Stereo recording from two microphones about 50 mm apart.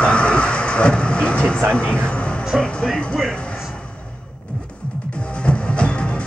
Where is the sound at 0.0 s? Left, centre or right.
Left.